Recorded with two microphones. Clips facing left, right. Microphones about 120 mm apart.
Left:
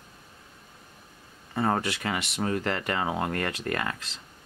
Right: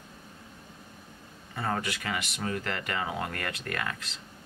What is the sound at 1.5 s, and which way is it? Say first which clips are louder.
Speech: left 5 dB; 30° left (ahead or behind).